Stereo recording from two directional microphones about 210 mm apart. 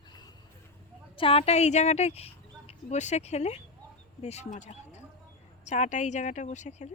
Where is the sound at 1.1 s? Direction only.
25° left (ahead or behind).